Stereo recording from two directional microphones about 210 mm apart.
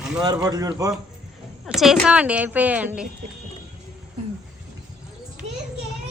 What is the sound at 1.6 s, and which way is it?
A woman's voice, centre (ahead or behind).